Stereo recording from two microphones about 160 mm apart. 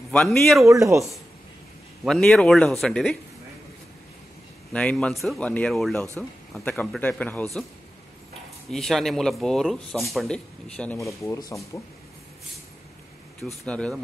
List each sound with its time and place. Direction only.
0.1 s speech: 5° left (ahead or behind)
0.7 s speech: 20° right (ahead or behind)
2.0 s speech: 5° left (ahead or behind)
4.7 s speech: 5° left (ahead or behind)
8.6 s speech: centre (ahead or behind)
11.1 s speech: 20° left (ahead or behind)
13.7 s speech: 5° left (ahead or behind)